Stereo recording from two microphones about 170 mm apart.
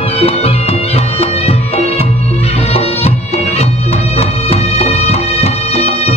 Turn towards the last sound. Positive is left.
turn(degrees=35)  # may be behind; listen again after turning